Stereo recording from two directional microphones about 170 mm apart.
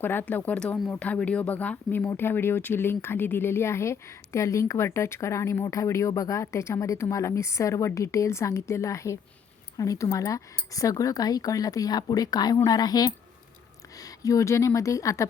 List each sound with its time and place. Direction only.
0.0 s speech: 10° left (ahead or behind)
14.2 s speech: 20° left (ahead or behind)